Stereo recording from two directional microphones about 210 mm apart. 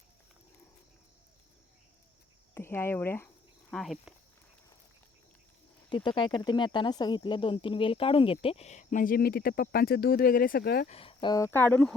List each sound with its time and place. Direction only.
2.6 s speech: 10° left (ahead or behind)
5.9 s speech: 20° left (ahead or behind); by 10.8 s 50° left (ahead or behind)
10.8 s speech: 25° left (ahead or behind); by 11.9 s 5° left (ahead or behind)